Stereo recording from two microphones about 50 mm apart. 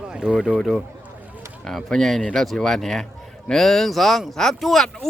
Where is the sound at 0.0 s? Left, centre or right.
Centre.